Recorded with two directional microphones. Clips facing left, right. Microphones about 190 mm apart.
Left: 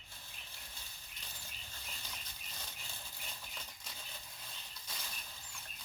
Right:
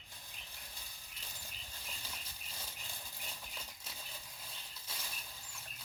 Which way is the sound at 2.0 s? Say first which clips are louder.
Even; 10° right (ahead or behind).